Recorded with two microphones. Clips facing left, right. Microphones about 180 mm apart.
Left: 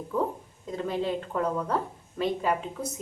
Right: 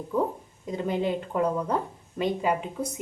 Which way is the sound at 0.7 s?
15° right (ahead or behind).